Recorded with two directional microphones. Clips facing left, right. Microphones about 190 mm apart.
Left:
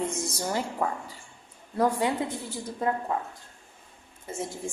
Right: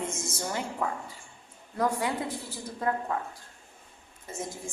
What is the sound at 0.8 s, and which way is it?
Speech, 35° left (ahead or behind).